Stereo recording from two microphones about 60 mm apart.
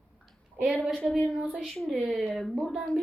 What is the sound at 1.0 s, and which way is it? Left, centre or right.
A woman's voice, centre.